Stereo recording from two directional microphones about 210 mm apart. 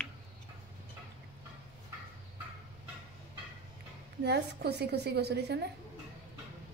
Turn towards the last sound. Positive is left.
turn(degrees=-50)  # may be behind; listen again after turning